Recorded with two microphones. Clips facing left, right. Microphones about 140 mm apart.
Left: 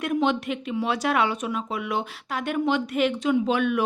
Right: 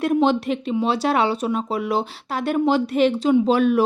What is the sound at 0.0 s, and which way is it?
Speech, 35° right (ahead or behind).